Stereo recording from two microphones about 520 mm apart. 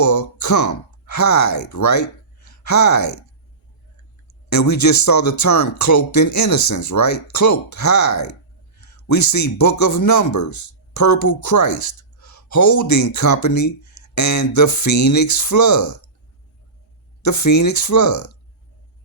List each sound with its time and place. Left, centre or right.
0.0 s speech: left
4.4 s a man's voice: left
17.2 s speech: left